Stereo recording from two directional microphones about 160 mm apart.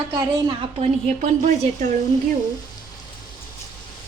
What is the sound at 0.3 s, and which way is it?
Speech, 25° right (ahead or behind).